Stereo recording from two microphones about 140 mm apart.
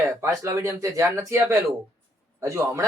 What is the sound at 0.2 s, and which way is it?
Speech, 20° right (ahead or behind).